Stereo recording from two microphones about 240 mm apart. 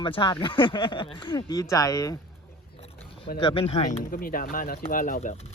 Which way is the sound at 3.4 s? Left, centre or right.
Left.